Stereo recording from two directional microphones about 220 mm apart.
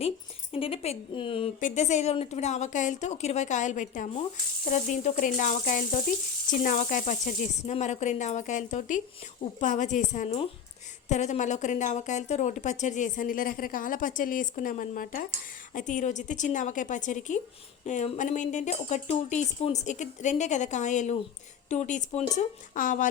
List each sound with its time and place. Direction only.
0.5 s speech: 25° left (ahead or behind)